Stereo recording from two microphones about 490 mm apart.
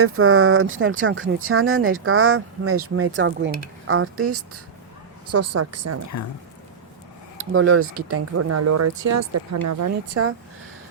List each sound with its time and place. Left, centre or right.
0.0 s speech: right
7.3 s speech: right